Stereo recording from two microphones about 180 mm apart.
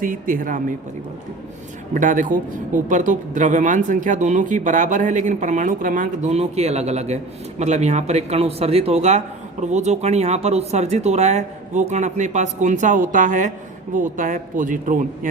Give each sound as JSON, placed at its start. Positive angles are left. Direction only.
{"t": 0.0, "sound": "speech", "side_deg": -50}
{"t": 1.9, "sound": "speech", "side_deg": -45}